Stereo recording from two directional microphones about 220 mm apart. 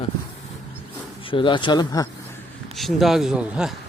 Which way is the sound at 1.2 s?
20° left (ahead or behind).